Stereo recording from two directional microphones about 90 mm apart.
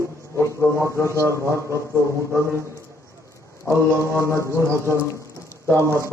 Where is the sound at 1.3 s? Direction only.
35° right (ahead or behind).